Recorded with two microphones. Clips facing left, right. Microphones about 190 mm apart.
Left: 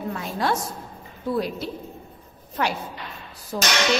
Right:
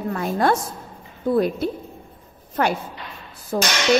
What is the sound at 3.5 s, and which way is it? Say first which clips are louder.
Speech: right 5 dB; 50° right (ahead or behind).